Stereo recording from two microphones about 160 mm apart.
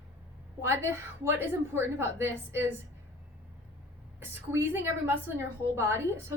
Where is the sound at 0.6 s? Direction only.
15° right (ahead or behind).